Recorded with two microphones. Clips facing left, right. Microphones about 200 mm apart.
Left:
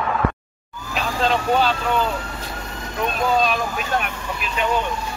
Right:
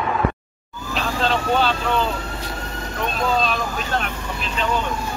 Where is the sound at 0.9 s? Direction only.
5° left (ahead or behind).